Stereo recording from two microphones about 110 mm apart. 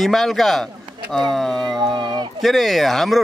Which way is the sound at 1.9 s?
45° right (ahead or behind).